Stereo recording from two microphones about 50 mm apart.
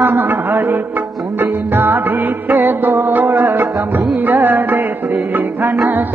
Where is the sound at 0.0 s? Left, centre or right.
Right.